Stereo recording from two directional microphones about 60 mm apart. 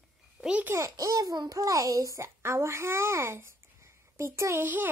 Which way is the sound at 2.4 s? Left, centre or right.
Right.